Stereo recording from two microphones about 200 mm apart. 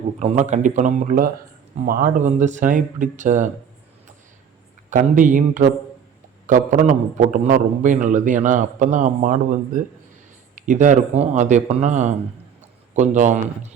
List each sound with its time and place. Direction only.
0.2 s a man's voice: 35° right (ahead or behind)
4.9 s a man's voice: 40° right (ahead or behind)